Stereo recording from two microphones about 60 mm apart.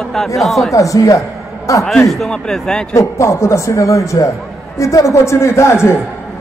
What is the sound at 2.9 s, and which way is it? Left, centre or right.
A man's voice, left.